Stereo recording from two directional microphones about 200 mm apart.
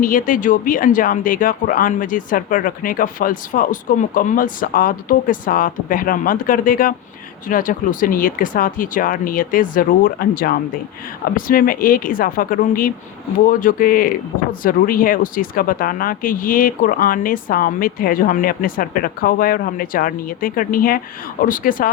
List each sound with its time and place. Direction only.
0.0 s speech: 45° left (ahead or behind)